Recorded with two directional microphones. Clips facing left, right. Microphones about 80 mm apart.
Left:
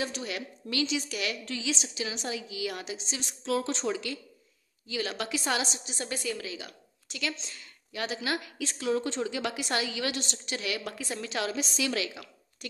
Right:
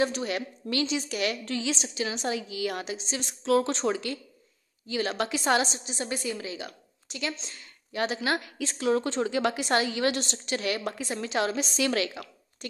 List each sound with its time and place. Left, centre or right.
0.0 s a woman's voice: right
5.9 s a woman's voice: right
6.4 s a woman's voice: right
10.8 s a woman's voice: right
11.5 s a woman's voice: right